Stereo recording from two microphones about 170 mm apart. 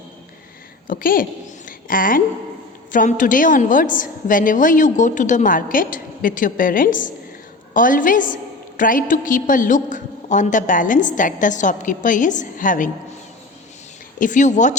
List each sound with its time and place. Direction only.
0.9 s a woman's voice: 55° left (ahead or behind)
14.2 s a woman's voice: 50° left (ahead or behind)